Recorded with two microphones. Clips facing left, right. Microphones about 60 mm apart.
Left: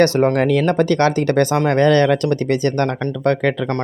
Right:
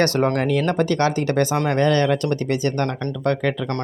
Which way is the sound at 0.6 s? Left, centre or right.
Left.